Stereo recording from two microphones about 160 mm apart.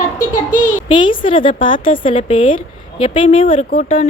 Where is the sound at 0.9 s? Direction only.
30° left (ahead or behind).